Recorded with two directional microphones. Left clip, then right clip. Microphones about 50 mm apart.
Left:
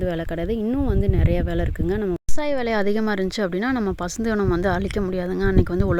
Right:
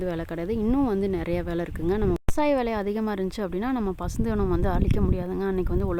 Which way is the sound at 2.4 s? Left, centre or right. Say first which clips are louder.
Left 2 dB; left.